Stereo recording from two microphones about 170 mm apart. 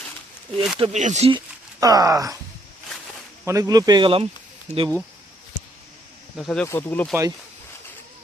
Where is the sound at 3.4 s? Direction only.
20° right (ahead or behind).